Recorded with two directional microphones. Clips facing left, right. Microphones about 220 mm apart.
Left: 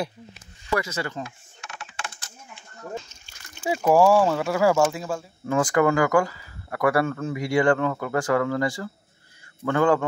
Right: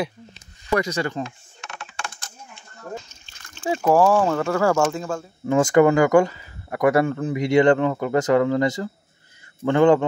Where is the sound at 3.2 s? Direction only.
10° left (ahead or behind).